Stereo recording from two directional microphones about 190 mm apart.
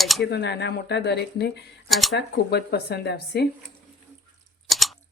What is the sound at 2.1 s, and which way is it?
Speech, 60° left (ahead or behind).